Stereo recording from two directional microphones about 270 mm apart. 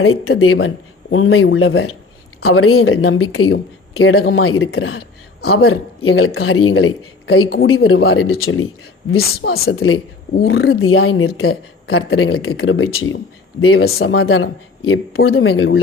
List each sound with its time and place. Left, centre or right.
0.0 s a woman's voice: left
9.1 s a woman's voice: left